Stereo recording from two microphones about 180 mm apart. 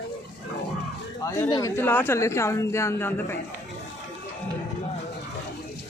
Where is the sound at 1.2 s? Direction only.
15° left (ahead or behind).